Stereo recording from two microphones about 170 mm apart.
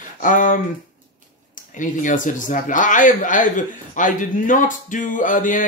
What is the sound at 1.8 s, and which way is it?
Speech, 50° left (ahead or behind).